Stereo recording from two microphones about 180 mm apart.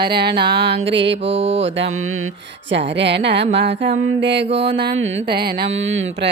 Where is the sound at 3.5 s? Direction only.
80° right.